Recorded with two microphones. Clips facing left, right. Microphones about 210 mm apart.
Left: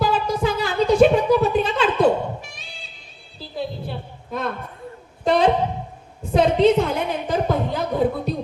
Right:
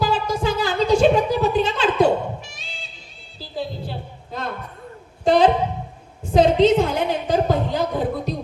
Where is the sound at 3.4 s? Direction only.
55° left (ahead or behind).